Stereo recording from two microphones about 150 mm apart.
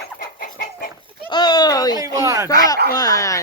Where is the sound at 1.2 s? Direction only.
30° left (ahead or behind).